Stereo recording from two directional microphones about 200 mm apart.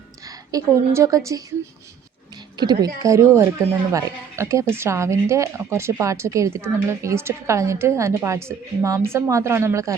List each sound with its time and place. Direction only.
0.3 s a woman's voice: 15° right (ahead or behind)
2.6 s speech: 20° right (ahead or behind)